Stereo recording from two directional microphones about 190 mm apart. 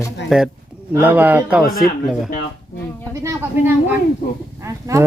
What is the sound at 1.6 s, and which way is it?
Speech, 50° left (ahead or behind).